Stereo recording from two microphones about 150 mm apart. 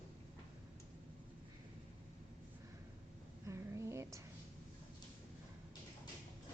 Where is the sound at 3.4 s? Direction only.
20° right (ahead or behind).